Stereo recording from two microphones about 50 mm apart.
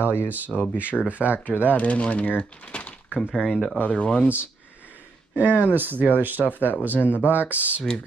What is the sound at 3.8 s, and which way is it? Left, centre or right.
Speech, left.